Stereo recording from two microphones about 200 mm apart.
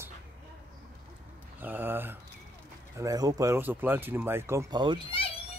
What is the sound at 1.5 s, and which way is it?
Speech, 10° right (ahead or behind).